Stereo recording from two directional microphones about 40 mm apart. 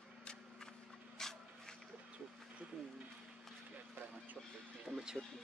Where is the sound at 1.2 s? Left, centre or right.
Centre.